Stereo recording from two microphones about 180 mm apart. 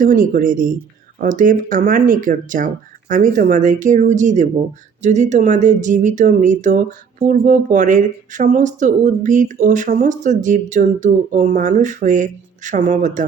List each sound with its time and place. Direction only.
0.0 s speech: 50° right (ahead or behind)